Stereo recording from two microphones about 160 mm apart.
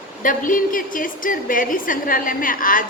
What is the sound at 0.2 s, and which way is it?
A woman's voice, 55° left (ahead or behind).